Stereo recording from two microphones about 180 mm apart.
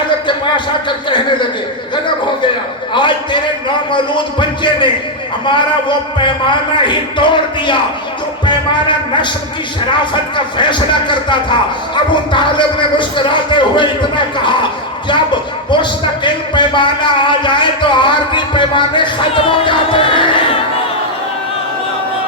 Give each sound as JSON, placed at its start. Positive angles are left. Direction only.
{"t": 0.3, "sound": "speech", "side_deg": 25}
{"t": 2.9, "sound": "a sound", "side_deg": 25}
{"t": 3.9, "sound": "a man's voice", "side_deg": 25}
{"t": 10.3, "sound": "a man's voice", "side_deg": 25}
{"t": 15.7, "sound": "a man's voice", "side_deg": 25}